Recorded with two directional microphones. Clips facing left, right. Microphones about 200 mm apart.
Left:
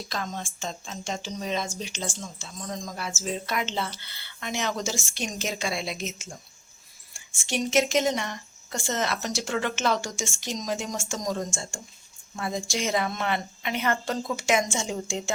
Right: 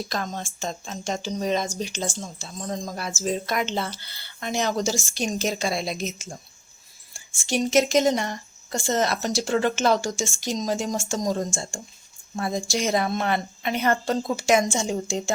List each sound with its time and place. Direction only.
0.1 s speech: 40° right (ahead or behind)